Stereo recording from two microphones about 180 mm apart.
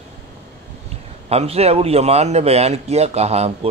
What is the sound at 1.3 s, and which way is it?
A man's voice, 35° right (ahead or behind).